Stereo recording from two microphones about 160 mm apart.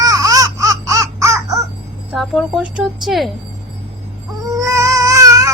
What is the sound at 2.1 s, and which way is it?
Speech, centre (ahead or behind).